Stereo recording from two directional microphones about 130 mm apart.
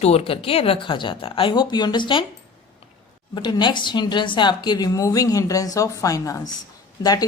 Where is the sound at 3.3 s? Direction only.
35° left (ahead or behind).